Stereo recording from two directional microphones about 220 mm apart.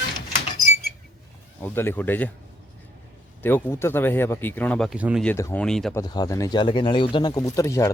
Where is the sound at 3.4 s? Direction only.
10° left (ahead or behind).